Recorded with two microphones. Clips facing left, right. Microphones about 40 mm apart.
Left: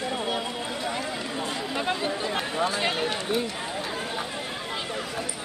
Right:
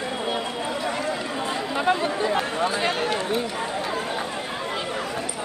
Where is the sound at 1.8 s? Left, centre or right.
Centre.